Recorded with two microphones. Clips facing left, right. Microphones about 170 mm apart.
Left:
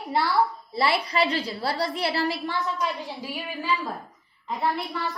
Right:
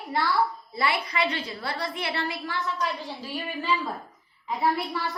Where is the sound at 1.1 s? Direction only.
35° left (ahead or behind).